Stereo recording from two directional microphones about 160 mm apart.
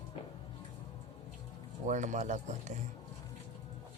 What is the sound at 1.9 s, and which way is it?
Speech, 50° right (ahead or behind).